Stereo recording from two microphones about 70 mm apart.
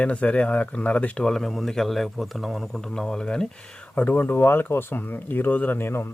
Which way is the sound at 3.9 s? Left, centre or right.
Left.